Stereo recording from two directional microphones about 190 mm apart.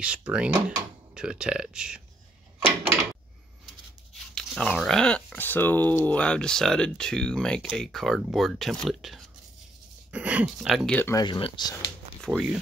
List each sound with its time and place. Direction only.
0.0 s speech: 5° right (ahead or behind)
4.4 s speech: 5° left (ahead or behind)
10.9 s speech: 10° left (ahead or behind)
11.2 s speech: 25° left (ahead or behind)
12.2 s speech: centre (ahead or behind)